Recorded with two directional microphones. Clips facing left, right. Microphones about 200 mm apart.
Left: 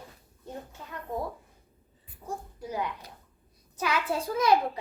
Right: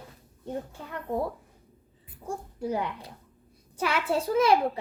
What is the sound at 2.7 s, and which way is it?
A child's voice, 30° right (ahead or behind).